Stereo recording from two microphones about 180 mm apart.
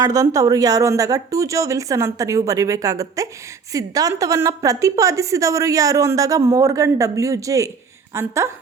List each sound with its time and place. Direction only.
0.0 s a woman's voice: 20° right (ahead or behind)